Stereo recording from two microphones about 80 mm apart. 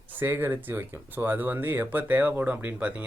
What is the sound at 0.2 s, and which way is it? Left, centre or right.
Speech, right.